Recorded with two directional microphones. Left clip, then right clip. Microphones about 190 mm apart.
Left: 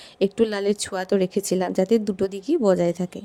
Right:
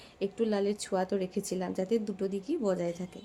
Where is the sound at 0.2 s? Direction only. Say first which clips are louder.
Left 9 dB; 45° left (ahead or behind).